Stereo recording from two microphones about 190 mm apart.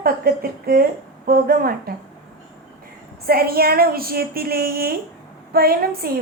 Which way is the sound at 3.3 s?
50° right (ahead or behind).